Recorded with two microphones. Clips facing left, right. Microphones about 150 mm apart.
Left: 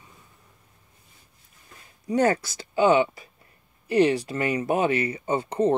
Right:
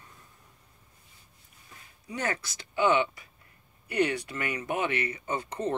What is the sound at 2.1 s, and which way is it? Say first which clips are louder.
Speech: left 11 dB; 40° left (ahead or behind).